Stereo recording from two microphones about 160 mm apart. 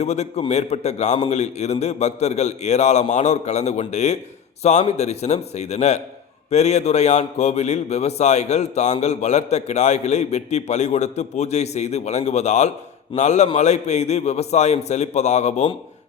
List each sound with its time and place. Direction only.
0.0 s a man's voice: 45° left (ahead or behind)